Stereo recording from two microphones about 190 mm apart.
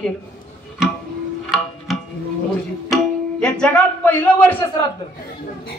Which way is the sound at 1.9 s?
Centre (ahead or behind).